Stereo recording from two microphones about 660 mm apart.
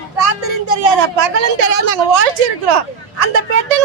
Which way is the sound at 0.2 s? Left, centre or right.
Right.